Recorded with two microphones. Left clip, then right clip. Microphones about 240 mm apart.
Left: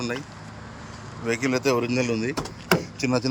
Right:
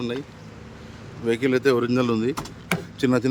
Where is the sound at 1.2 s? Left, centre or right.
Centre.